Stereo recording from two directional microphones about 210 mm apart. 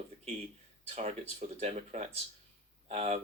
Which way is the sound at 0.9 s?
30° right (ahead or behind).